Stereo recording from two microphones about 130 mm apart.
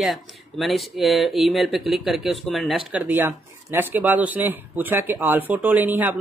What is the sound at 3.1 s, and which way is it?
Speech, 15° right (ahead or behind).